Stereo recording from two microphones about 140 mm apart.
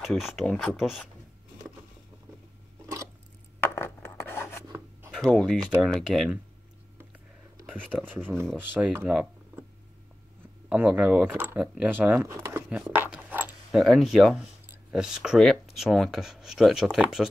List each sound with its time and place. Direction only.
0.0 s speech: centre (ahead or behind)
3.6 s a sound: 15° left (ahead or behind)
5.1 s speech: 5° left (ahead or behind)
8.0 s speech: 15° right (ahead or behind)
10.7 s speech: 10° right (ahead or behind)
13.7 s speech: centre (ahead or behind)